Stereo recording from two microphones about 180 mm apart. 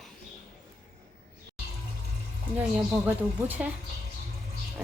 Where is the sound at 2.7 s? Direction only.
10° right (ahead or behind).